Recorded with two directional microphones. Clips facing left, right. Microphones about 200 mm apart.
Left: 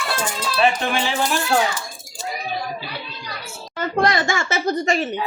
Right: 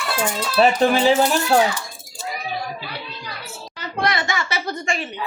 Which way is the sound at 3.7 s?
50° left (ahead or behind).